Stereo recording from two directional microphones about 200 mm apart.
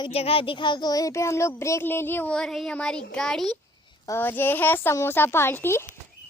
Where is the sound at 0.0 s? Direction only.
30° left (ahead or behind).